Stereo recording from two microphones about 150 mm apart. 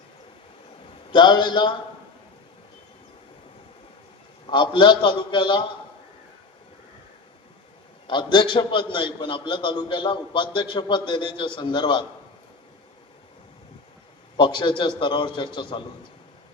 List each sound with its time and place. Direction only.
1.1 s a man's voice: 30° left (ahead or behind)
4.5 s a man's voice: 30° left (ahead or behind)
8.0 s a man's voice: 30° left (ahead or behind)
14.3 s a man's voice: 30° left (ahead or behind)